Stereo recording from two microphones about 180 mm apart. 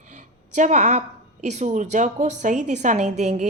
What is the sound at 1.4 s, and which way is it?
A woman's voice, 40° right (ahead or behind).